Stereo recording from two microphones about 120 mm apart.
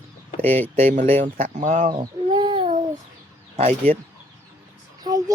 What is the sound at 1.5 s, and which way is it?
Speech, 90° right.